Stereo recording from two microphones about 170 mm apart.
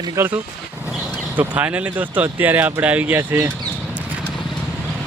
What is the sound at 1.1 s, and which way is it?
Speech, 10° right (ahead or behind).